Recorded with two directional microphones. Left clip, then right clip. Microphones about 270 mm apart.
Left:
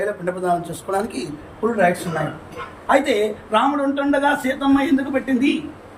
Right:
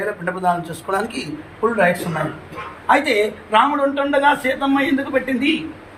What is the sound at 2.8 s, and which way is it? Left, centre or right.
A man's voice, centre.